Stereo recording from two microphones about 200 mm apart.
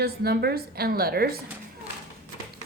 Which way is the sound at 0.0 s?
50° right (ahead or behind).